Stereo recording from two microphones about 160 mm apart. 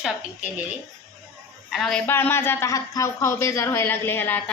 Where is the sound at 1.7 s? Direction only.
Centre (ahead or behind).